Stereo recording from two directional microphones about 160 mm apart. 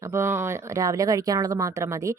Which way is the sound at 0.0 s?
15° right (ahead or behind).